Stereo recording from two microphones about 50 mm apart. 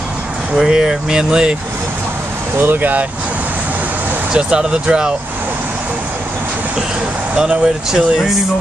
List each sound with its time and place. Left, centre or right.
0.6 s speech: centre
2.5 s speech: right
4.3 s speech: centre
7.3 s speech: centre